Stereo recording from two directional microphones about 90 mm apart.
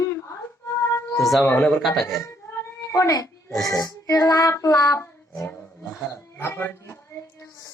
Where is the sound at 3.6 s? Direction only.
40° left (ahead or behind).